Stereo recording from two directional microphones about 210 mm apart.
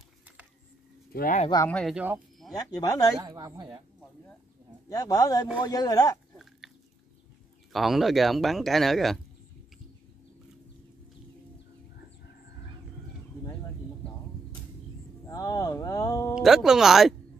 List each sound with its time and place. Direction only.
1.1 s speech: 40° left (ahead or behind)
1.7 s speech: 5° left (ahead or behind)
2.0 s speech: 5° right (ahead or behind)
2.5 s speech: 15° left (ahead or behind)
3.2 s speech: 20° right (ahead or behind)
4.8 s speech: 15° left (ahead or behind)
7.7 s speech: centre (ahead or behind)
15.2 s speech: 15° left (ahead or behind)
16.3 s speech: centre (ahead or behind)